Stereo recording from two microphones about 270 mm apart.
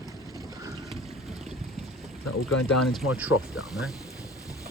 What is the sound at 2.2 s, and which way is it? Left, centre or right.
Speech, left.